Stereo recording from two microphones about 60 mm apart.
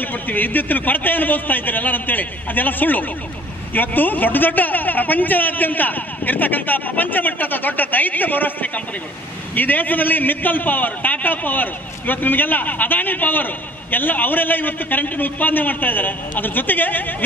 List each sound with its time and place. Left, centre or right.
0.0 s a man's voice: left